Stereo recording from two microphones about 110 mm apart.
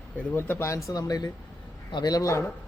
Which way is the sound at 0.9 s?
35° left (ahead or behind).